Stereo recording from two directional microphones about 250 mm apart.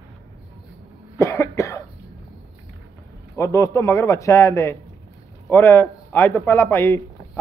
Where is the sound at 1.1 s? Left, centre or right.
Centre.